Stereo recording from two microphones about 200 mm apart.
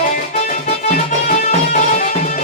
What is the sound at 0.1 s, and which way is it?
Music, 40° left (ahead or behind).